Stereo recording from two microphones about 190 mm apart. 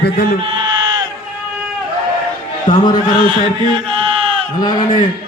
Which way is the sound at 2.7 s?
25° left (ahead or behind).